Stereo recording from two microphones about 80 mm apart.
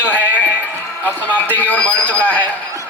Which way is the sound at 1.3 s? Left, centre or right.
Left.